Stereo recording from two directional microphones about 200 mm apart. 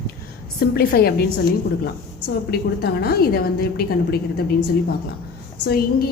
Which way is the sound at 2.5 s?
50° left (ahead or behind).